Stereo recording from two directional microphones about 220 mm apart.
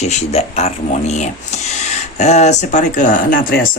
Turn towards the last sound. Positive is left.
turn(degrees=40)  # may be behind; listen again after turning